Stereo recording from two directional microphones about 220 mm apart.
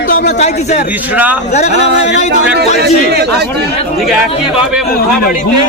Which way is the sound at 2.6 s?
45° right (ahead or behind).